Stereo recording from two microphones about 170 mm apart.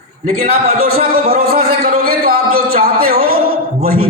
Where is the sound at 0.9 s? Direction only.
60° right (ahead or behind).